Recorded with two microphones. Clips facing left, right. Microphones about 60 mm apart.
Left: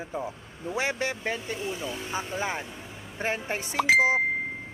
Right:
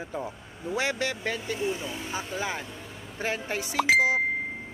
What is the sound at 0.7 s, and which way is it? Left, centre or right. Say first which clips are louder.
Speech: even; left.